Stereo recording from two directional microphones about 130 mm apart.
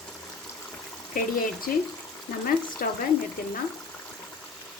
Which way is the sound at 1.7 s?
90° left.